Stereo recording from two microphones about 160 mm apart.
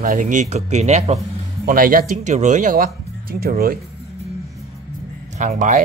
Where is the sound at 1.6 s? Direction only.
60° right (ahead or behind).